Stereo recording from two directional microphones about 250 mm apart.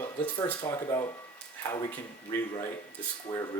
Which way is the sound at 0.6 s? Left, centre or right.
Centre.